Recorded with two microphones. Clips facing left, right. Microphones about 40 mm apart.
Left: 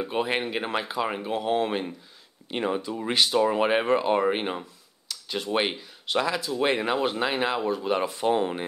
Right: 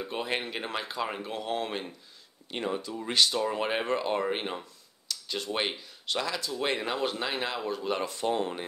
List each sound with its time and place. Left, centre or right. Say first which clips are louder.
0.0 s speech: left 6 dB; centre